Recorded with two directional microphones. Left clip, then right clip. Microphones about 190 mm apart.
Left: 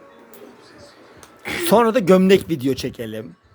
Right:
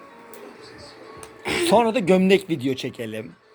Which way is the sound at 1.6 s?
55° left (ahead or behind).